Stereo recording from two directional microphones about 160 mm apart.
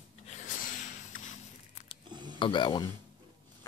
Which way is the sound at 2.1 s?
30° right (ahead or behind).